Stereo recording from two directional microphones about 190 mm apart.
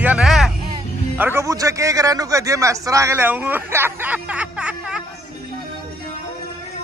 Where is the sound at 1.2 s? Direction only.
15° right (ahead or behind).